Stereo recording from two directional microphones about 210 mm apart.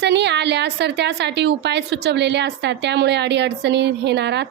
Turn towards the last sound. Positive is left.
turn(degrees=-55)  # may be behind; listen again after turning